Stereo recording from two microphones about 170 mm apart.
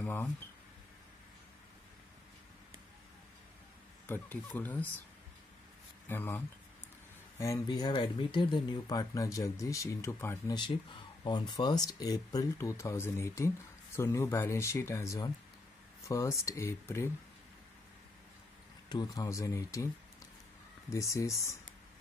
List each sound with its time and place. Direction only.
0.0 s a sound: 10° left (ahead or behind)
4.1 s speech: 10° left (ahead or behind)
6.0 s speech: 10° left (ahead or behind)
18.9 s speech: 25° left (ahead or behind)
20.9 s speech: 20° left (ahead or behind)